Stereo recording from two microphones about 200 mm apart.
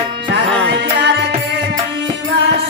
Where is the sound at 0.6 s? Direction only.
60° right (ahead or behind).